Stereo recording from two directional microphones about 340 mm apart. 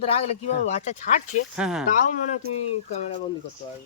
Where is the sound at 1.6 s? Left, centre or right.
Centre.